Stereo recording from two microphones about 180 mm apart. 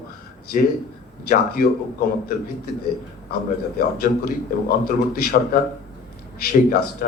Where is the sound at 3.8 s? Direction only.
55° left (ahead or behind).